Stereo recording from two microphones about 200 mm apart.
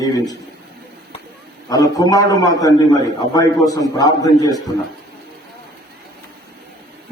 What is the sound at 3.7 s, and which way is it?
Speech, 20° left (ahead or behind).